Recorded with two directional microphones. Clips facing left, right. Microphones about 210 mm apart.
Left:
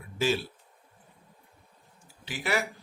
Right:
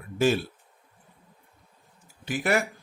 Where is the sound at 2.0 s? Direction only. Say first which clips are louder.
Right 6 dB; 50° right (ahead or behind).